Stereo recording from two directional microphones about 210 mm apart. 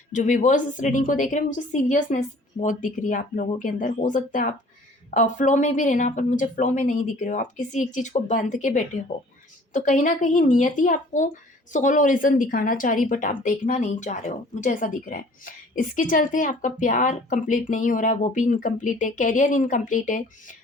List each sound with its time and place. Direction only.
0.1 s a woman's voice: 35° left (ahead or behind)